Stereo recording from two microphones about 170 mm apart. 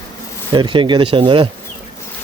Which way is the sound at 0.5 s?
30° right (ahead or behind).